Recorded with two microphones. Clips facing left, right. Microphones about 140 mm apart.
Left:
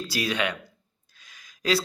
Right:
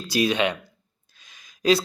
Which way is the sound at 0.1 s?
20° right (ahead or behind).